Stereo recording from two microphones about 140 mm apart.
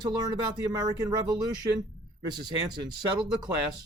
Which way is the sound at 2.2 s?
30° right (ahead or behind).